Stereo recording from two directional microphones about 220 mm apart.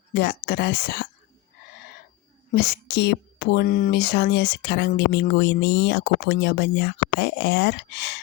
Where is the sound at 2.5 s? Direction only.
45° left (ahead or behind).